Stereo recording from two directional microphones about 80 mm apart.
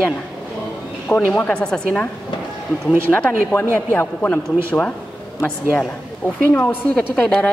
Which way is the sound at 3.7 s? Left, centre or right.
Left.